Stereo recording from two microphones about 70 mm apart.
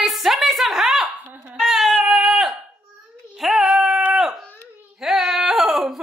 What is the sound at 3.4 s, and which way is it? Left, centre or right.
Child singing, centre.